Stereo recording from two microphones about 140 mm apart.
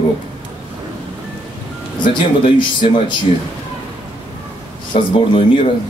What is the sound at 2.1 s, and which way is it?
Speech, 35° left (ahead or behind).